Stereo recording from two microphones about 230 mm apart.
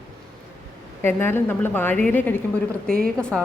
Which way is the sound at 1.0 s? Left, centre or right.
Centre.